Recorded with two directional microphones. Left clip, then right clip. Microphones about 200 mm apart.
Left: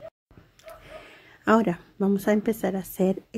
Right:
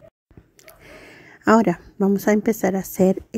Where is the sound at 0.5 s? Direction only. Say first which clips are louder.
Left 1 dB; 30° right (ahead or behind).